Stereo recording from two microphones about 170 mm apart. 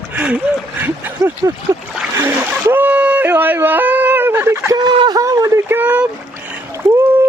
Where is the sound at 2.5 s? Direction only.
10° right (ahead or behind).